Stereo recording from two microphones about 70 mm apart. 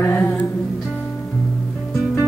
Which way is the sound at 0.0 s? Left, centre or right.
Left.